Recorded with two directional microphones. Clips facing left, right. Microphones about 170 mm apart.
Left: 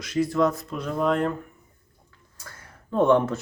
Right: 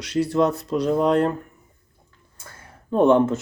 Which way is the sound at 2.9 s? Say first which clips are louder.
Right 3 dB; 20° right (ahead or behind).